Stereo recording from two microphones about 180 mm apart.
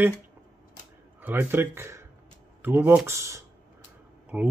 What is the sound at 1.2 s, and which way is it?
Speech, 10° right (ahead or behind).